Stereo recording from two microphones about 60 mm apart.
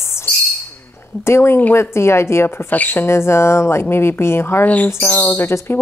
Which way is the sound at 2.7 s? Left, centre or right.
Left.